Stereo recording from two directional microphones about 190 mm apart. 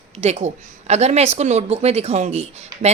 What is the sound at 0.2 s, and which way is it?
A woman's voice, 35° right (ahead or behind).